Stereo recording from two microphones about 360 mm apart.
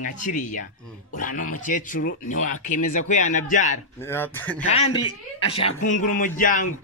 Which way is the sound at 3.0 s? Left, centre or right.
Left.